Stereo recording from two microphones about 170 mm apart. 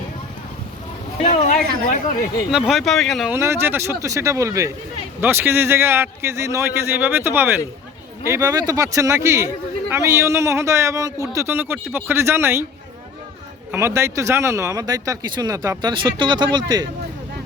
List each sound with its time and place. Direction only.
1.2 s speech: 40° left (ahead or behind)
2.5 s speech: 5° right (ahead or behind)
3.3 s a man's voice: 15° right (ahead or behind)
13.7 s speech: 15° right (ahead or behind)